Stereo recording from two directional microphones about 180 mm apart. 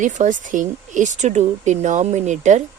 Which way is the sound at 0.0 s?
45° right (ahead or behind).